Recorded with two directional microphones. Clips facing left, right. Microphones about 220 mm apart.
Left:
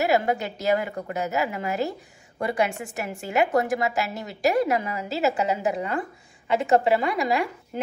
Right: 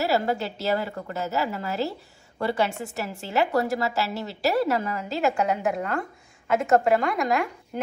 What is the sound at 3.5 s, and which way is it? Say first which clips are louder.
A woman's voice: left 1 dB; 15° left (ahead or behind).